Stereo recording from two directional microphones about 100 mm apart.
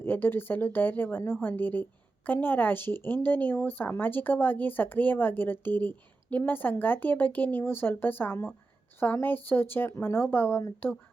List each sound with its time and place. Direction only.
0.0 s a woman's voice: 20° left (ahead or behind)